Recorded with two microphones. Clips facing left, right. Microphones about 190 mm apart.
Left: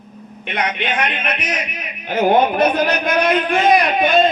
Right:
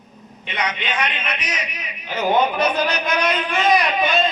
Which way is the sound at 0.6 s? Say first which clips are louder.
Left 3 dB; 50° left (ahead or behind).